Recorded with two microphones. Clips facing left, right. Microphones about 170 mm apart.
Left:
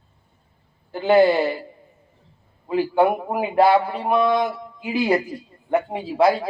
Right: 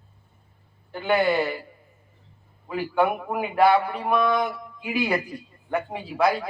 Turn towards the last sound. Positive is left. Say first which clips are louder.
# left 5 dB
turn(degrees=25)  # may be behind; listen again after turning